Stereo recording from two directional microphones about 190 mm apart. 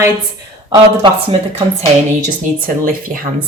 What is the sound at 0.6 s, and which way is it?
Speech, 25° right (ahead or behind).